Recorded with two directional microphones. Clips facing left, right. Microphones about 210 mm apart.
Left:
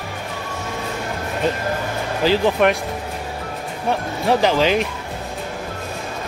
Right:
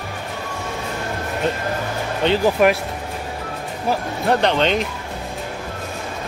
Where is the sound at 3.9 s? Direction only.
Centre (ahead or behind).